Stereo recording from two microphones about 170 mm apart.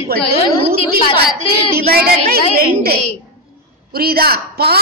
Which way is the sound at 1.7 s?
65° right (ahead or behind).